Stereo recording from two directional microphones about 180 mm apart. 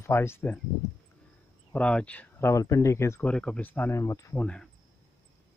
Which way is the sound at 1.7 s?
5° left (ahead or behind).